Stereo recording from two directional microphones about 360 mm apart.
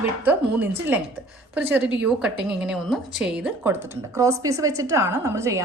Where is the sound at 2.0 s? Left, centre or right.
Centre.